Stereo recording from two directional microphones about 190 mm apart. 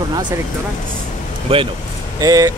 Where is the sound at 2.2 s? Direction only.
20° right (ahead or behind).